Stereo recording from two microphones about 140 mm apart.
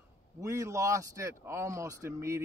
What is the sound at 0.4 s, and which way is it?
Speech, 20° right (ahead or behind).